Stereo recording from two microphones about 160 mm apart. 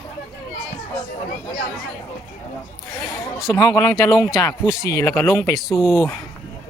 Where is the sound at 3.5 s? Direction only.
25° left (ahead or behind).